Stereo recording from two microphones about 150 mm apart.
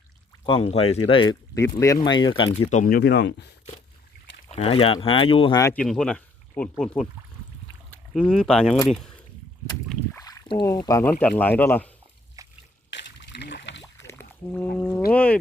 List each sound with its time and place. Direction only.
0.4 s speech: 40° left (ahead or behind)
1.5 s speech: 20° left (ahead or behind)
2.6 s speech: 50° left (ahead or behind)
2.8 s speech: 90° left
4.5 s speech: 40° left (ahead or behind)
5.7 s speech: 5° left (ahead or behind)
8.1 s speech: 5° left (ahead or behind)
10.2 s rowboat: 25° left (ahead or behind)
11.2 s speech: 10° left (ahead or behind)
12.4 s a sound: 20° right (ahead or behind)
14.1 s a sound: 15° left (ahead or behind)
15.1 s speech: 10° left (ahead or behind)